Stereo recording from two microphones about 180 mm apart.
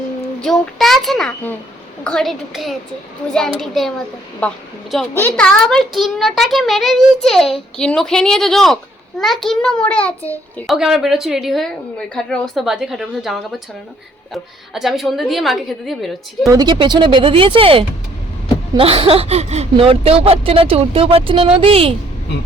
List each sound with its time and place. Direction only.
0.4 s a woman's voice: centre (ahead or behind)
16.5 s speech: 25° right (ahead or behind)